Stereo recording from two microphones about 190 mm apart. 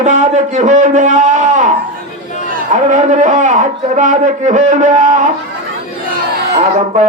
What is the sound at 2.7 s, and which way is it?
A man's voice, 40° right (ahead or behind).